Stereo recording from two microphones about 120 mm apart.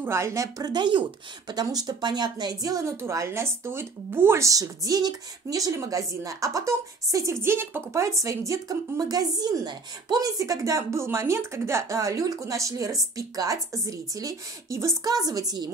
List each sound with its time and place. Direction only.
0.0 s a woman's voice: 25° right (ahead or behind)